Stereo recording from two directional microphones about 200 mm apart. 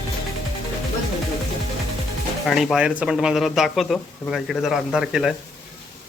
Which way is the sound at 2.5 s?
Centre (ahead or behind).